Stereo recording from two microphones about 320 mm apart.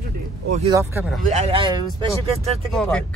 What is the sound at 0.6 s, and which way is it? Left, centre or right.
Speech, centre.